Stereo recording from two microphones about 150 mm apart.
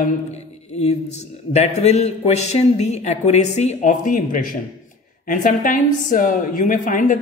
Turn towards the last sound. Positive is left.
turn(degrees=60)  # may be behind; listen again after turning